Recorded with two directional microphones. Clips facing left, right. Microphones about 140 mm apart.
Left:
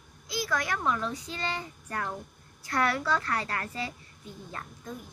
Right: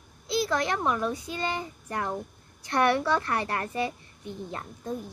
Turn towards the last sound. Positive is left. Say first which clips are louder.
# right 5 dB
turn(degrees=-25)  # may be behind; listen again after turning